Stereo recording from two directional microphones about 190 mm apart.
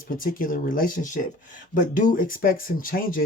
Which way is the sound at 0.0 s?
45° left (ahead or behind).